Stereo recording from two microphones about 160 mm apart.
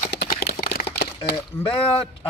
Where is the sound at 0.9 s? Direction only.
85° left.